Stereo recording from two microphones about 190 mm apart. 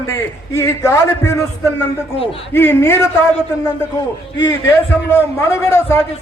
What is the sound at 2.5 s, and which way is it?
Speech, 10° left (ahead or behind).